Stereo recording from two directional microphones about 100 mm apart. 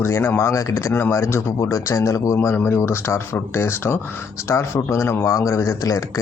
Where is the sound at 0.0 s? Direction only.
25° left (ahead or behind).